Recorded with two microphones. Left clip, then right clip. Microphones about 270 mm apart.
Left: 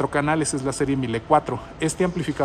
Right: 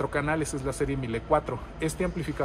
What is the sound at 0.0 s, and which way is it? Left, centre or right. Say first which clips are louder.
A man's voice: left 6 dB; left.